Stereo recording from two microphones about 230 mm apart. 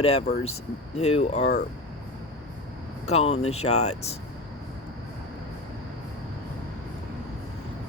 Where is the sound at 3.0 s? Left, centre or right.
Left.